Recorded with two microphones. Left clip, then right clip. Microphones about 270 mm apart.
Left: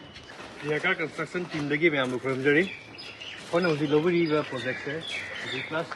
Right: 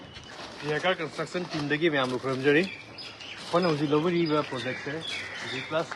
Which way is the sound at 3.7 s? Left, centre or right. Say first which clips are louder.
Left 2 dB; centre.